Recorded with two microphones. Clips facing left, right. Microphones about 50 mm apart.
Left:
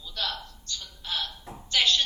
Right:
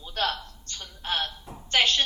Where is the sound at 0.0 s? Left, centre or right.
Right.